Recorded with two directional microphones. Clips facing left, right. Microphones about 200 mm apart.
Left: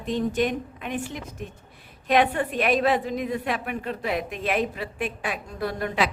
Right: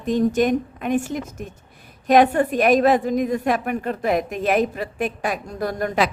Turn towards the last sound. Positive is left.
turn(degrees=-45)  # may be behind; listen again after turning